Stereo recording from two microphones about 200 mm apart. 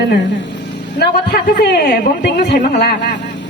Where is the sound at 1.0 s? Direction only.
55° left (ahead or behind).